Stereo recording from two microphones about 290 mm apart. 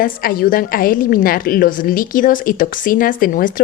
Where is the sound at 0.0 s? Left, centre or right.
Left.